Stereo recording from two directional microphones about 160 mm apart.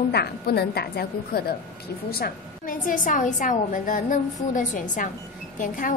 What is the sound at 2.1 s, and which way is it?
A woman's voice, 65° left (ahead or behind).